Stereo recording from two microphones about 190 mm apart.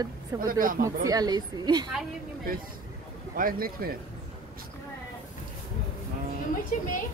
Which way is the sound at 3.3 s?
50° right (ahead or behind).